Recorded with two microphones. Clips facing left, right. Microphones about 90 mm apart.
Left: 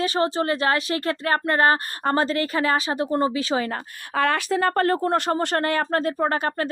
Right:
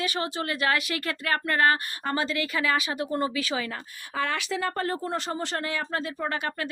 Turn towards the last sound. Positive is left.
turn(degrees=40)  # may be behind; listen again after turning